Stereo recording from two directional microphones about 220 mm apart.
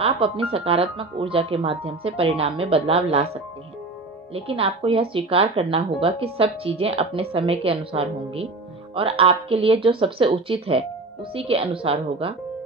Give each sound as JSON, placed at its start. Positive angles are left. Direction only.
{"t": 0.2, "sound": "speech", "side_deg": -25}
{"t": 4.3, "sound": "speech", "side_deg": -25}